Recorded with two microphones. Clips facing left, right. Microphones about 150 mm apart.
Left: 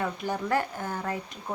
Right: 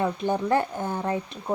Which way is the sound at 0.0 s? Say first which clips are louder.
Right 5 dB; 25° right (ahead or behind).